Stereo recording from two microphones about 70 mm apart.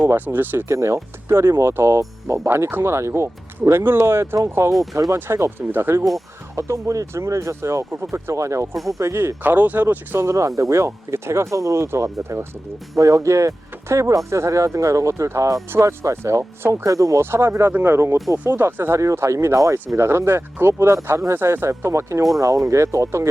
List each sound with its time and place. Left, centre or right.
0.1 s speech: right
2.0 s speech: right
2.6 s speech: right
2.9 s speech: right
6.6 s speech: right
8.7 s speech: centre
9.0 s speech: right
9.4 s speech: right
10.2 s speech: right
16.8 s speech: right
17.2 s speech: right